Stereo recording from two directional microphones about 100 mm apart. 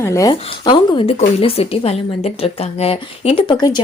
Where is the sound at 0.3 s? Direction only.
45° left (ahead or behind); by 3.5 s 65° left (ahead or behind).